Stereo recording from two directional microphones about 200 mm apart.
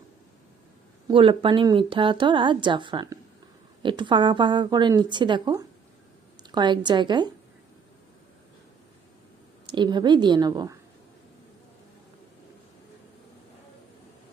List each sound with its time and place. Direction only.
1.0 s speech: 25° right (ahead or behind)
9.6 s speech: 25° right (ahead or behind)